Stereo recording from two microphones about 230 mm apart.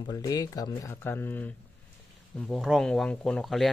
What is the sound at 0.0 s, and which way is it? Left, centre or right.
Speech, centre.